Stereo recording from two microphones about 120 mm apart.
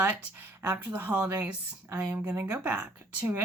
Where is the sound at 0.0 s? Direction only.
10° right (ahead or behind).